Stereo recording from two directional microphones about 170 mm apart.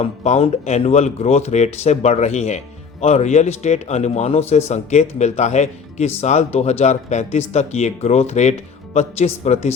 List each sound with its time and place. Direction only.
0.0 s a man's voice: 35° left (ahead or behind)